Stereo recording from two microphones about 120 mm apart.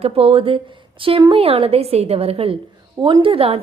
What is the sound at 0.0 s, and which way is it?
A woman's voice, 55° right (ahead or behind).